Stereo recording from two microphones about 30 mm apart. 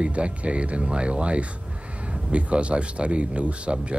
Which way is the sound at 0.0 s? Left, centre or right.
Right.